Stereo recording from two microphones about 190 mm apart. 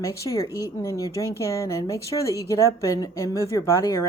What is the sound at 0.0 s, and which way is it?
A woman's voice, 15° left (ahead or behind).